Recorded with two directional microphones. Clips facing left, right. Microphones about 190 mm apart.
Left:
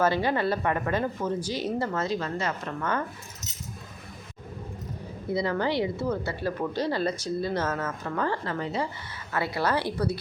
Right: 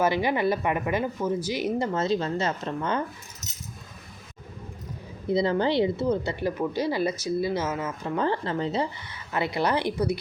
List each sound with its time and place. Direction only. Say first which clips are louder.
0.0 s a woman's voice: right 1 dB; 15° right (ahead or behind)
5.3 s a woman's voice: right 3 dB; 25° right (ahead or behind)